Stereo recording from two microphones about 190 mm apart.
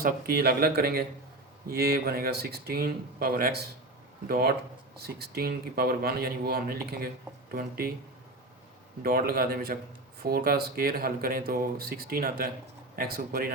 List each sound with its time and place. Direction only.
0.0 s speech: 55° right (ahead or behind)
9.0 s speech: 50° right (ahead or behind)